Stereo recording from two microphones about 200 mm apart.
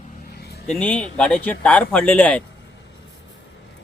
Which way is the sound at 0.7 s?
5° left (ahead or behind).